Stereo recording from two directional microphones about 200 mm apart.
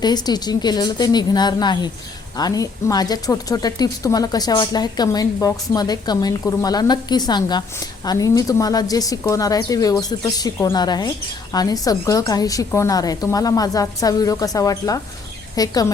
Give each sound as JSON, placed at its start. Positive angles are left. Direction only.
{"t": 0.0, "sound": "a woman's voice", "side_deg": 20}